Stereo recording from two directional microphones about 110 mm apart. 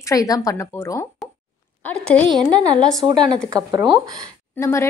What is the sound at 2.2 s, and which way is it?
A woman's voice, 40° right (ahead or behind).